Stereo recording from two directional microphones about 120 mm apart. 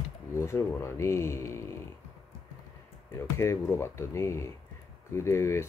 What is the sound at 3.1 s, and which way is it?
Speech, 25° left (ahead or behind).